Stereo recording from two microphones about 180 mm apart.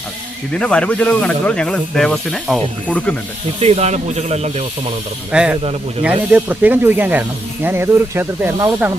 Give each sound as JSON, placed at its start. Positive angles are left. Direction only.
{"t": 0.6, "sound": "speech", "side_deg": 5}
{"t": 3.6, "sound": "speech", "side_deg": -35}
{"t": 5.3, "sound": "speech", "side_deg": -5}